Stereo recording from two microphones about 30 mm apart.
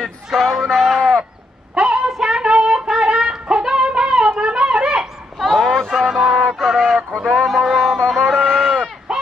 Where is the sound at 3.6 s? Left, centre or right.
Right.